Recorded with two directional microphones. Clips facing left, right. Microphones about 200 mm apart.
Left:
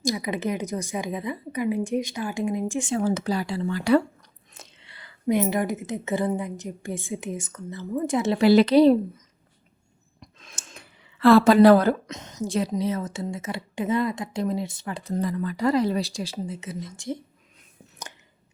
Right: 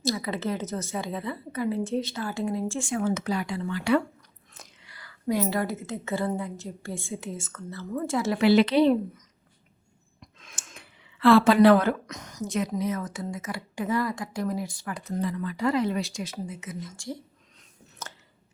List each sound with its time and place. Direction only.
0.0 s a woman's voice: 15° left (ahead or behind)
2.9 s speech: 30° left (ahead or behind)
4.5 s a woman's voice: 25° left (ahead or behind)
8.4 s speech: 40° left (ahead or behind)
10.2 s a sound: 40° left (ahead or behind)
12.0 s a woman's voice: 25° left (ahead or behind)
15.2 s speech: 40° left (ahead or behind); by 17.2 s 20° left (ahead or behind)